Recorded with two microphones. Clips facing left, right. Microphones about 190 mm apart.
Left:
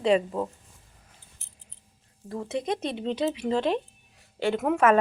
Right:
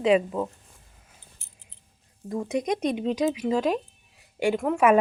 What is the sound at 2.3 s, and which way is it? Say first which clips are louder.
A woman's voice: right 3 dB; 15° right (ahead or behind).